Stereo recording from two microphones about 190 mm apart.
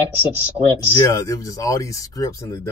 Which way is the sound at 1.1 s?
15° left (ahead or behind).